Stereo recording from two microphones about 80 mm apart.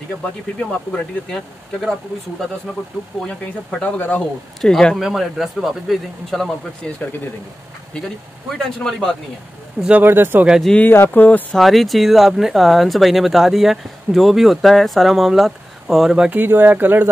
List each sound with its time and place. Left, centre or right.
0.6 s speech: centre
3.1 s speech: centre
3.8 s speech: centre
4.6 s speech: centre
8.5 s speech: centre
10.0 s speech: right
10.8 s speech: left
11.5 s speech: centre
16.3 s speech: right